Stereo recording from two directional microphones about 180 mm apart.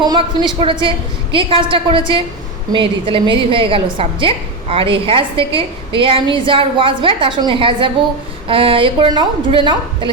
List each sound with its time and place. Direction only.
0.0 s a woman's voice: 25° right (ahead or behind)